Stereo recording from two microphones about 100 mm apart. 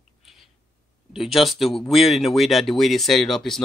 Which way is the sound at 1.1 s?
Centre (ahead or behind).